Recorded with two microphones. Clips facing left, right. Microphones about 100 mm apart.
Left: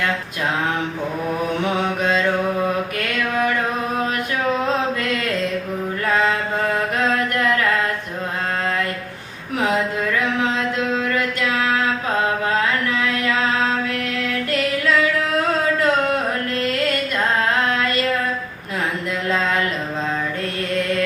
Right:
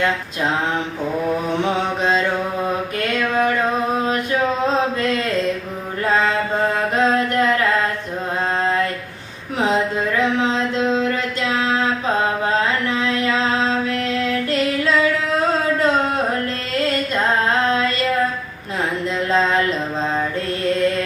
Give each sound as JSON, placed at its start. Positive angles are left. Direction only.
{"t": 1.6, "sound": "mantra", "side_deg": -30}
{"t": 4.6, "sound": "mantra", "side_deg": -30}
{"t": 6.9, "sound": "mantra", "side_deg": -30}
{"t": 9.6, "sound": "a sound", "side_deg": -30}
{"t": 17.7, "sound": "a sound", "side_deg": -25}
{"t": 19.3, "sound": "music", "side_deg": -30}